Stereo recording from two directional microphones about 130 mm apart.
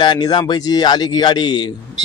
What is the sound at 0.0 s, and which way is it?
Speech, 35° left (ahead or behind).